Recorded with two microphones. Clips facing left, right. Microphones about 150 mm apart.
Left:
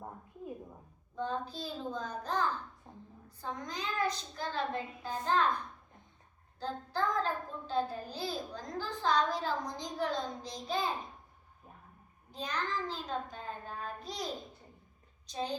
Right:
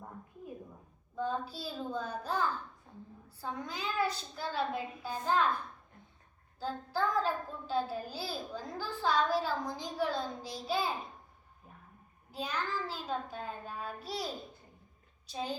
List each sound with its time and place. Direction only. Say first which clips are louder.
1.1 s a woman's voice: right 1 dB; 5° right (ahead or behind)
2.9 s a sound: even; 30° left (ahead or behind)
3.2 s a woman's voice: right 1 dB; 5° right (ahead or behind)
6.6 s a child's voice: right 1 dB; 5° right (ahead or behind)
12.3 s a woman's voice: even; 5° right (ahead or behind)
15.3 s a child's voice: even; 5° right (ahead or behind)